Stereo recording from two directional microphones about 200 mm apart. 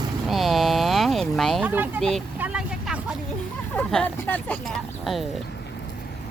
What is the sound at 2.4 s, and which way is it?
Vehicle, 5° right (ahead or behind).